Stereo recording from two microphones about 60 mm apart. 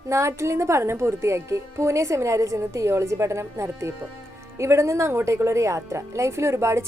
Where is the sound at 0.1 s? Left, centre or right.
Right.